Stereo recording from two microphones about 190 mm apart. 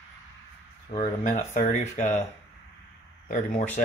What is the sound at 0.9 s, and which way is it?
Speech, 40° left (ahead or behind).